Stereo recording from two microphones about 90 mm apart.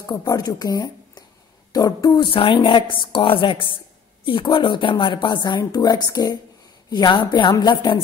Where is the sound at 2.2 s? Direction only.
80° left; by 6.4 s 45° left (ahead or behind).